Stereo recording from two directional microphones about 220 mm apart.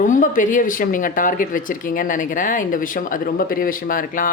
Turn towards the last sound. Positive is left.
turn(degrees=35)  # may be behind; listen again after turning